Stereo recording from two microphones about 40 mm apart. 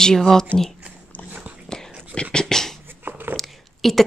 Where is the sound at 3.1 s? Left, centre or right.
Right.